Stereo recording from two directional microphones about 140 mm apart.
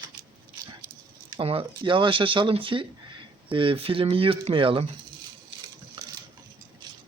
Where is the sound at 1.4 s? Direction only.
40° right (ahead or behind).